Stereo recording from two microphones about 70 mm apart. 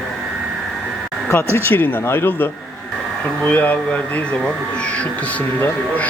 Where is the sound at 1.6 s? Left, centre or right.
Left.